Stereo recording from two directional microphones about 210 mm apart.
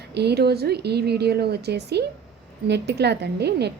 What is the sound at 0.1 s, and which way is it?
A woman's voice, 50° right (ahead or behind).